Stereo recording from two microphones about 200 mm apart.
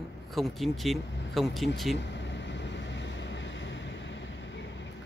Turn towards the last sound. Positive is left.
turn(degrees=65)  # may be behind; listen again after turning